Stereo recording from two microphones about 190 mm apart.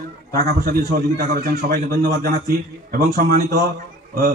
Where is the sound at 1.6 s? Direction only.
55° right (ahead or behind).